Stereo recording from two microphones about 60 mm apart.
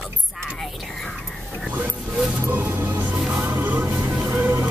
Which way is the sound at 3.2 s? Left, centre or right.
Centre.